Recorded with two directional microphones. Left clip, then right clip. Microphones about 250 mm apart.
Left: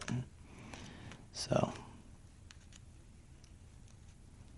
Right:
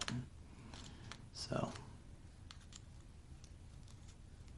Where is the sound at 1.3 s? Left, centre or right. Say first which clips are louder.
Left 8 dB; left.